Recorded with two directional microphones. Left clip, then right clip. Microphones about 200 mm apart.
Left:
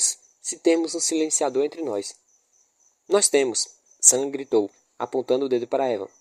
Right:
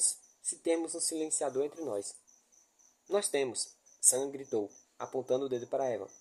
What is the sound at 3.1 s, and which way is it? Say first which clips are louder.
Speech: left 11 dB; 40° left (ahead or behind).